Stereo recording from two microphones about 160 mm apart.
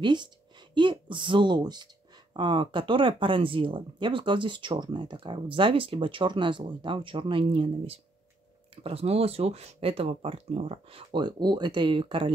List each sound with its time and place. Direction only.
0.0 s a woman's voice: 30° right (ahead or behind)